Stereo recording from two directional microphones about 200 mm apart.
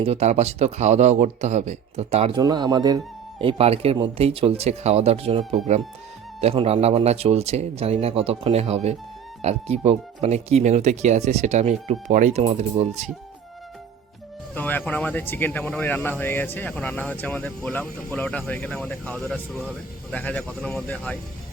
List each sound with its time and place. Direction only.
0.0 s speech: 30° right (ahead or behind)
2.4 s speech: 20° right (ahead or behind)
14.5 s speech: 10° left (ahead or behind)